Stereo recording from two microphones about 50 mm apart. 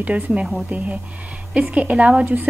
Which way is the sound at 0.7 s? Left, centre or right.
Right.